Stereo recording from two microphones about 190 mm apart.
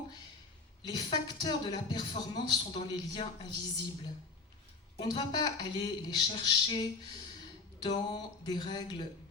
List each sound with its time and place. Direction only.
0.8 s a woman's voice: 20° left (ahead or behind)